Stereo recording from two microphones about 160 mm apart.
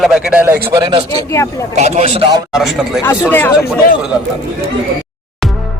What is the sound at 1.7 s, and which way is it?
Speech, 45° right (ahead or behind).